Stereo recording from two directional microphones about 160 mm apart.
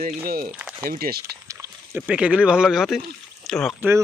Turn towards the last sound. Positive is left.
turn(degrees=-15)  # may be behind; listen again after turning